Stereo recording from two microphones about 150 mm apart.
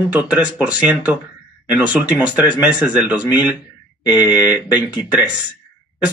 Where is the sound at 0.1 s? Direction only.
10° right (ahead or behind).